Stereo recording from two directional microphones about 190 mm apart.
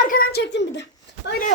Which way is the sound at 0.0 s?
50° left (ahead or behind).